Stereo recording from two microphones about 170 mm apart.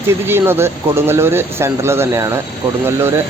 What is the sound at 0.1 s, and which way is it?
Speech, 15° right (ahead or behind).